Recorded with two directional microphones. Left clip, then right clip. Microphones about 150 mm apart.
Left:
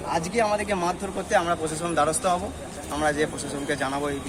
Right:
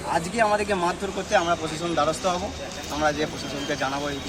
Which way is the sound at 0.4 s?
15° left (ahead or behind).